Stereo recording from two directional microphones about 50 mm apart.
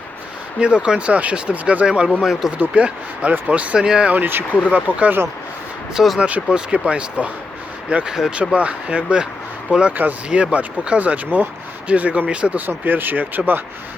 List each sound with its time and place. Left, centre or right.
0.6 s speech: right
2.2 s speech: centre
2.6 s speech: right
3.8 s speech: centre
4.1 s speech: right
5.9 s speech: centre
6.1 s speech: right
12.5 s speech: right